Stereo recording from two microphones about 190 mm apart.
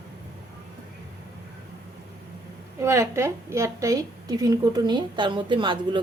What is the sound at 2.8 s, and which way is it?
A woman's voice, 15° right (ahead or behind).